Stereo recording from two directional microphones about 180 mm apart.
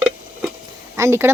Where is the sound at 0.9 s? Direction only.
15° right (ahead or behind).